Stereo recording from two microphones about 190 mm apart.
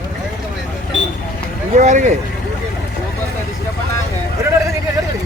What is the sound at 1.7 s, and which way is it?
Speech, 40° right (ahead or behind).